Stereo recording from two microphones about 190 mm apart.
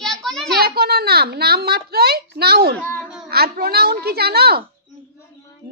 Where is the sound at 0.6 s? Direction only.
55° right (ahead or behind).